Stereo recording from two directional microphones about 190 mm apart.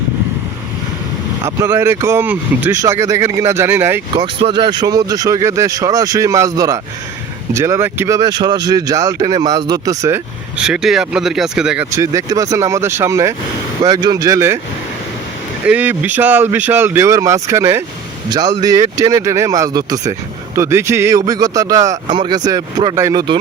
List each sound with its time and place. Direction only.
1.5 s speech: 15° right (ahead or behind)
4.2 s speech: 25° right (ahead or behind)
10.6 s speech: 5° right (ahead or behind)
11.9 s speech: 15° right (ahead or behind)
15.6 s speech: 10° right (ahead or behind); by 23.4 s 25° right (ahead or behind)